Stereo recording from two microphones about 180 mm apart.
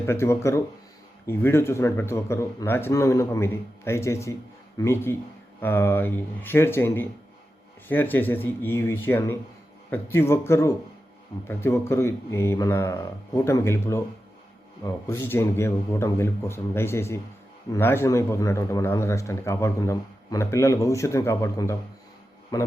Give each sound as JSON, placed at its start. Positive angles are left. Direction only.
{"t": 0.0, "sound": "a man's voice", "side_deg": 15}